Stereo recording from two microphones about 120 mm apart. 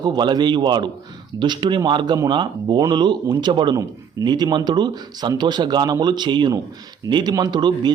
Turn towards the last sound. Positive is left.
turn(degrees=-40)  # may be behind; listen again after turning